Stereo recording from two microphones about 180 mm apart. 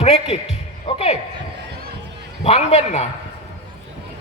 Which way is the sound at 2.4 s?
35° left (ahead or behind).